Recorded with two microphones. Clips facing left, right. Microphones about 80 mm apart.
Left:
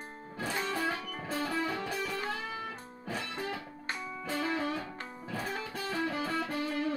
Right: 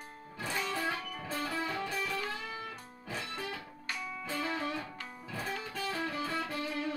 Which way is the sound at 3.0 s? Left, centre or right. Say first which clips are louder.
Left 3 dB; left.